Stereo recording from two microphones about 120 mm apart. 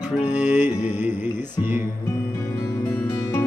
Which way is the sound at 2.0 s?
25° left (ahead or behind).